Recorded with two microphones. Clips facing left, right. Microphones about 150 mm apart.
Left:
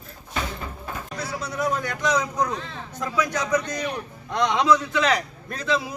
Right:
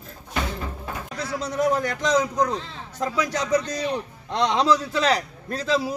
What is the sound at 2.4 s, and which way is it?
Speech, 35° right (ahead or behind).